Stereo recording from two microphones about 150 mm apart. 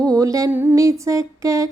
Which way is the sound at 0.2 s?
25° right (ahead or behind).